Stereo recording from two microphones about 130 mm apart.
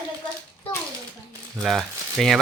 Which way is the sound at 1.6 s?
Centre (ahead or behind).